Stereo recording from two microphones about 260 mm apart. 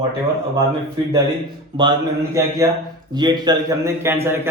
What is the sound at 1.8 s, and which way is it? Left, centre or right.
Speech, centre.